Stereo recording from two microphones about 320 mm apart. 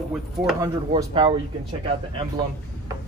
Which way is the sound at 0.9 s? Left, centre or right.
Centre.